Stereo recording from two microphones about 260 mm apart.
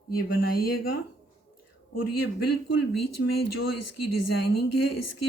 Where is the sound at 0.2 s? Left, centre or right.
Left.